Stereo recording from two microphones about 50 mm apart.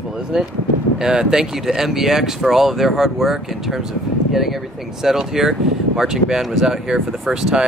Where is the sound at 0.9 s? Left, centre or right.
Centre.